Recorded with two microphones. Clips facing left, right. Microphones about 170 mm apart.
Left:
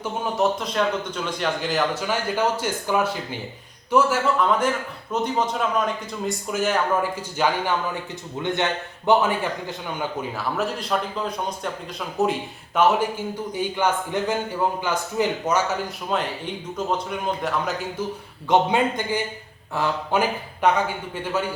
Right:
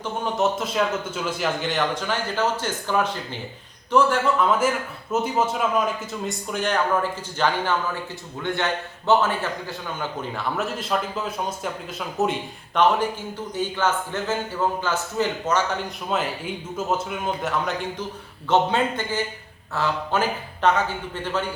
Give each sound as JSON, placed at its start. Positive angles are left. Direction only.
{"t": 0.0, "sound": "a man's voice", "side_deg": 0}
{"t": 6.5, "sound": "a man's voice", "side_deg": 5}
{"t": 10.0, "sound": "a man's voice", "side_deg": 0}
{"t": 16.1, "sound": "a man's voice", "side_deg": 0}
{"t": 18.4, "sound": "speech", "side_deg": 15}